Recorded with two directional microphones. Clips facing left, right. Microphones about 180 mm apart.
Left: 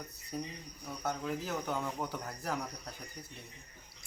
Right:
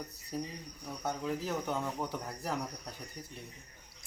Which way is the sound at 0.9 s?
Centre (ahead or behind).